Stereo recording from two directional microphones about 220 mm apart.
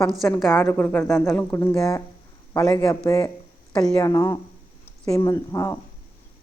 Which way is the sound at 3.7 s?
5° left (ahead or behind).